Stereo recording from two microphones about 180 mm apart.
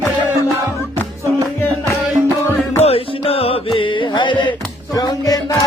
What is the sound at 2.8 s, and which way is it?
Music, 35° left (ahead or behind).